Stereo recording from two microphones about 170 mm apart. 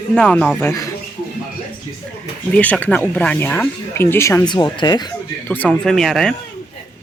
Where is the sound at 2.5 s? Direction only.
5° left (ahead or behind); by 5.1 s 25° left (ahead or behind).